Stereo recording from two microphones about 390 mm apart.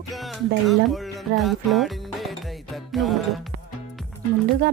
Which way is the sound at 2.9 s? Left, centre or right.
Centre.